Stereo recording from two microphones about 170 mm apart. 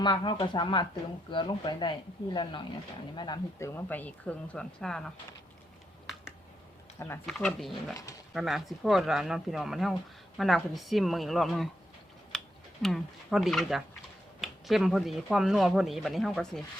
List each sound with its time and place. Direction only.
0.0 s speech: 25° left (ahead or behind); by 5.1 s 5° left (ahead or behind)
7.3 s speech: 5° left (ahead or behind)
12.3 s a sound: centre (ahead or behind)
12.8 s speech: centre (ahead or behind)